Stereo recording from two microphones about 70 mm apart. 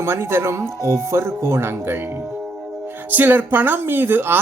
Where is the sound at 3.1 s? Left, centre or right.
Right.